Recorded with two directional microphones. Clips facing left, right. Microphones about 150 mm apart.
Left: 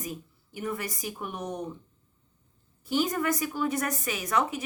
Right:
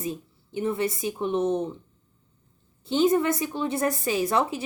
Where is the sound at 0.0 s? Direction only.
25° right (ahead or behind).